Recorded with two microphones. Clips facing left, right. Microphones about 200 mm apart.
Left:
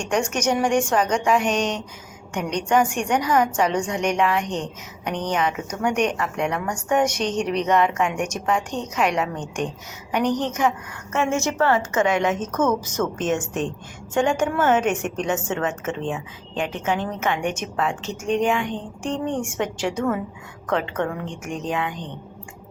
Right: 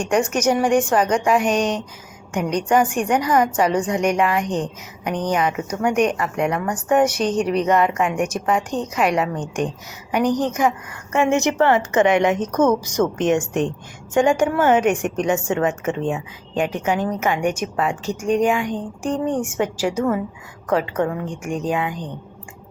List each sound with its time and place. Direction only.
0.0 s a woman's voice: 5° right (ahead or behind)
14.1 s a woman's voice: 10° right (ahead or behind)